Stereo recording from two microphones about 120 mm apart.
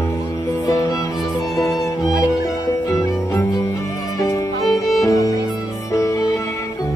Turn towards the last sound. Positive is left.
turn(degrees=25)  # may be behind; listen again after turning